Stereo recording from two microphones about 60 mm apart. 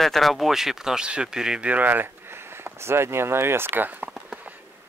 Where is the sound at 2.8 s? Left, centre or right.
Right.